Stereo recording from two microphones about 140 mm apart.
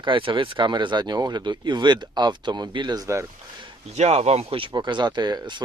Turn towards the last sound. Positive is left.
turn(degrees=-30)  # may be behind; listen again after turning